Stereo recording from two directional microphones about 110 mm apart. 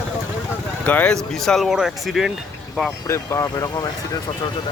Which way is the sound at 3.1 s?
25° left (ahead or behind).